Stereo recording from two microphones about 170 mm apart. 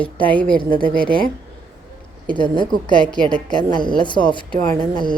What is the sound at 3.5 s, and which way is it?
Speech, 25° left (ahead or behind).